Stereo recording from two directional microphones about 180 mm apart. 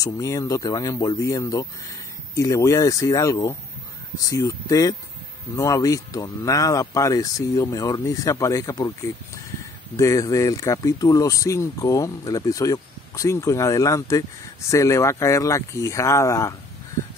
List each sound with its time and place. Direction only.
0.0 s speech: 20° left (ahead or behind)
9.9 s speech: 20° left (ahead or behind)